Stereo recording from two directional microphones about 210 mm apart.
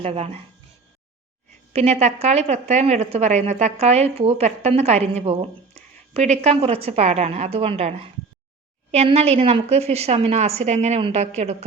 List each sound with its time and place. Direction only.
0.0 s speech: 30° right (ahead or behind)
1.7 s a woman's voice: 30° right (ahead or behind)